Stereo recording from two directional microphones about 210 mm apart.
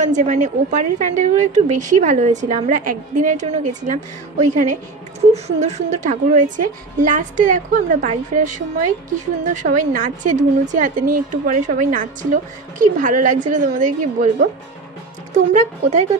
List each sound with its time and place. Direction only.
0.0 s a woman's voice: 35° right (ahead or behind)